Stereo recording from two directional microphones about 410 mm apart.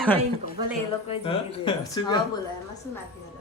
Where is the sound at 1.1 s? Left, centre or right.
Centre.